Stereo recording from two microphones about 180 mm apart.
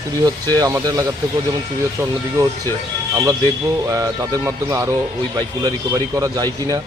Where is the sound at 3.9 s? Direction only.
15° right (ahead or behind).